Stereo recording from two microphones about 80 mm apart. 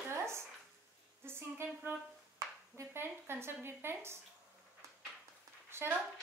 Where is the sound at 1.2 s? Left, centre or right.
Right.